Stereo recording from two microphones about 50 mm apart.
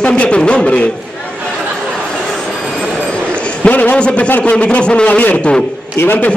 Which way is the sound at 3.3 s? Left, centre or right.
Left.